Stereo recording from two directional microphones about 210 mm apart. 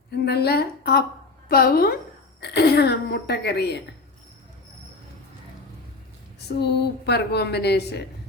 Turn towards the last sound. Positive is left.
turn(degrees=50)  # may be behind; listen again after turning